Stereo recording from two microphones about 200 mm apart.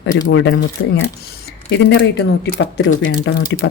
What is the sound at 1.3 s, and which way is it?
Speech, 50° left (ahead or behind).